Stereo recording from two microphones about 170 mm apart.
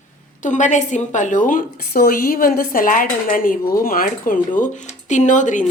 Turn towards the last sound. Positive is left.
turn(degrees=45)  # may be behind; listen again after turning